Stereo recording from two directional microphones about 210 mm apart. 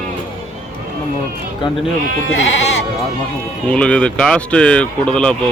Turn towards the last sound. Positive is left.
turn(degrees=5)  # may be behind; listen again after turning